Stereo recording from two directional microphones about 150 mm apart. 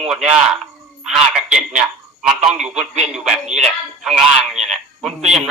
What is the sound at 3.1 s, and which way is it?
Speech, 5° right (ahead or behind).